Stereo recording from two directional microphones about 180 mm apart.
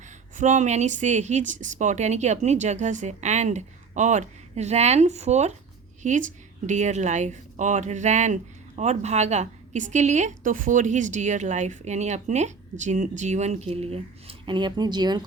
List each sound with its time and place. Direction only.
0.3 s a woman's voice: 40° right (ahead or behind); by 15.2 s 25° right (ahead or behind)